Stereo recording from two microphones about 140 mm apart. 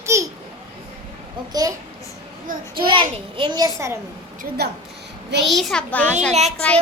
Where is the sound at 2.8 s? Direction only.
35° right (ahead or behind).